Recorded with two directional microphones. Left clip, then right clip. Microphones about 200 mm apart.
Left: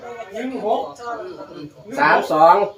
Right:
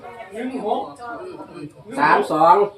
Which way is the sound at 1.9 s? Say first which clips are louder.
Left 1 dB; 5° right (ahead or behind).